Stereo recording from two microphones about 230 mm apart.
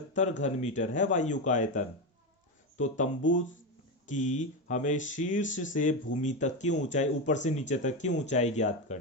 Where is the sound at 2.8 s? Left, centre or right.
Left.